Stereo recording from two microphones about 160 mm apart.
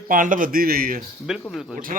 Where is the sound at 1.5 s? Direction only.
Centre (ahead or behind).